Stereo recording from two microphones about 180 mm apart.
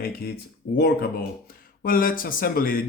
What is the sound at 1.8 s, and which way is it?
Speech, 50° left (ahead or behind).